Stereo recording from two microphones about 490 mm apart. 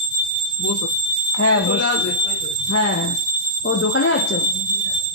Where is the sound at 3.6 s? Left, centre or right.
Left.